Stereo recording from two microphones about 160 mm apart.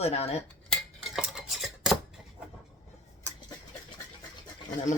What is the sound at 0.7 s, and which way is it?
Dishes, centre (ahead or behind).